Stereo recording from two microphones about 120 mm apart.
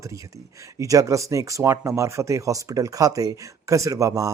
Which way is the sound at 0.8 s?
25° right (ahead or behind).